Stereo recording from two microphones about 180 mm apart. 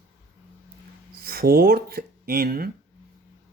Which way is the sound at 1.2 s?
55° right (ahead or behind).